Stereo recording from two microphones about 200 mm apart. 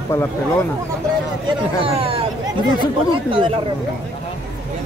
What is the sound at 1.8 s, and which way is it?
Speech, 25° right (ahead or behind).